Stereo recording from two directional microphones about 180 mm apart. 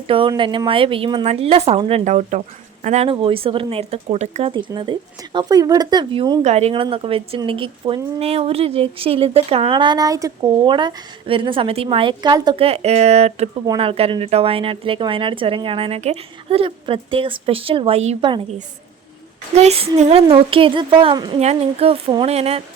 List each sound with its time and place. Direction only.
0.1 s speech: 30° right (ahead or behind)
6.4 s speech: 35° right (ahead or behind)
19.5 s speech: 35° right (ahead or behind)